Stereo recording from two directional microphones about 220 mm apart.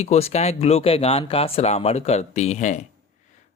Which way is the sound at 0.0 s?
30° left (ahead or behind).